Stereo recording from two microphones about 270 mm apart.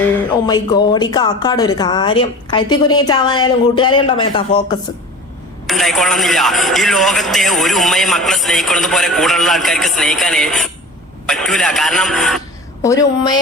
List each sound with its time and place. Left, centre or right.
0.4 s speech: centre
5.6 s speech: centre